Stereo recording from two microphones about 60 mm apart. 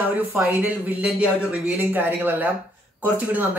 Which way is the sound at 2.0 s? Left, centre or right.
Right.